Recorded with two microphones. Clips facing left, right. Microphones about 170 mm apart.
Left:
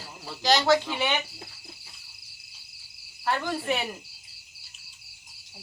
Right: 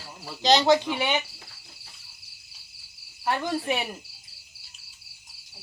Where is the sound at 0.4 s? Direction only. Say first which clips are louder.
Right 2 dB; 20° right (ahead or behind).